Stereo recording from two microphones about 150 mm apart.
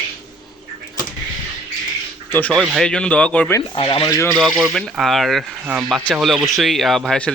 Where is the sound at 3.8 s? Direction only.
35° left (ahead or behind).